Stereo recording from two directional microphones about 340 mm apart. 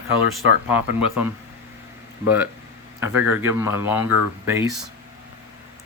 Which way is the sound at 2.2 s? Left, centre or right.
Centre.